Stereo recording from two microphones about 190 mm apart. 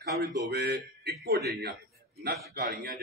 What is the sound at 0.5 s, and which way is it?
A man's voice, 55° right (ahead or behind).